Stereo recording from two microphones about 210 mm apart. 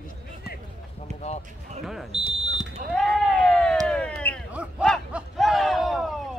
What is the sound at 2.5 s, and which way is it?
Smoke detector, centre (ahead or behind).